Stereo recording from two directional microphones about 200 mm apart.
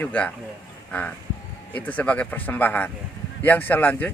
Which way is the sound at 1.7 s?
10° left (ahead or behind).